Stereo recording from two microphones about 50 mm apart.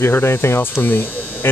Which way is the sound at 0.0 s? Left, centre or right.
Left.